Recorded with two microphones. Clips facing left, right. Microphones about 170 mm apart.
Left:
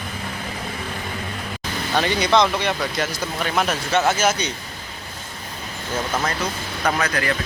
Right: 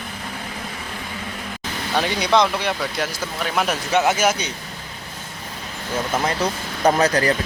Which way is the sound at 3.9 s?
15° right (ahead or behind).